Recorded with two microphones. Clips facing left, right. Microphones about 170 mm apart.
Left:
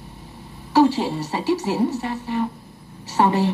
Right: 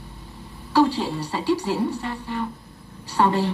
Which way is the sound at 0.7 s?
15° left (ahead or behind).